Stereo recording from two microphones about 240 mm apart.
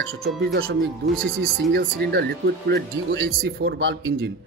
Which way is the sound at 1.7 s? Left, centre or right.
Right.